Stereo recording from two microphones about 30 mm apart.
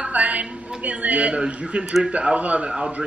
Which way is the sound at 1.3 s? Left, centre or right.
Right.